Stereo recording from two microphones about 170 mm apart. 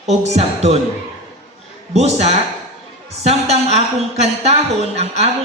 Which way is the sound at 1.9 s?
40° right (ahead or behind).